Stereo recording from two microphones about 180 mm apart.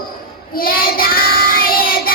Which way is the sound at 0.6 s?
55° left (ahead or behind).